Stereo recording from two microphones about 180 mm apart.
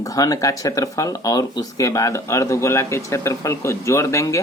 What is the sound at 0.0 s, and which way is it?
Speech, 20° left (ahead or behind).